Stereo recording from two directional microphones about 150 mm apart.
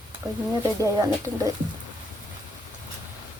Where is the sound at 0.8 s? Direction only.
25° right (ahead or behind).